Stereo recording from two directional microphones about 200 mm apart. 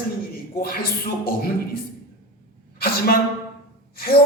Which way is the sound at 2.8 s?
50° left (ahead or behind).